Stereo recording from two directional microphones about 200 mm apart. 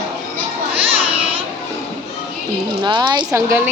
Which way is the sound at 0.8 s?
30° right (ahead or behind).